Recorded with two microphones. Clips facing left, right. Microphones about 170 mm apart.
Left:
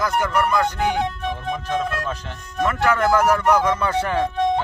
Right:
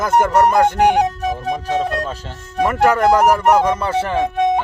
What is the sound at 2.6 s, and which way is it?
Speech, 40° right (ahead or behind).